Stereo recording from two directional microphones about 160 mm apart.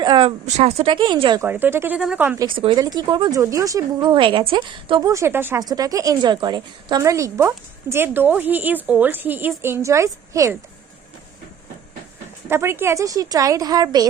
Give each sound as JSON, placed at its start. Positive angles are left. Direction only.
{"t": 0.0, "sound": "speech", "side_deg": -30}
{"t": 0.4, "sound": "speech", "side_deg": -40}
{"t": 1.4, "sound": "a woman's voice", "side_deg": -10}
{"t": 2.4, "sound": "a woman's voice", "side_deg": -30}
{"t": 12.5, "sound": "speech", "side_deg": -15}